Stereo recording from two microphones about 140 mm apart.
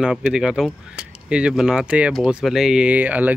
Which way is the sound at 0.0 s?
5° right (ahead or behind).